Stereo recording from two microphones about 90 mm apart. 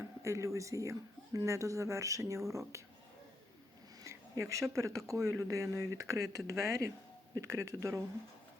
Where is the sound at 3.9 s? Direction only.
45° right (ahead or behind).